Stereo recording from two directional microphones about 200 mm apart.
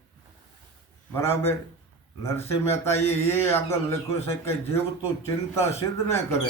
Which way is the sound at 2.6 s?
10° left (ahead or behind).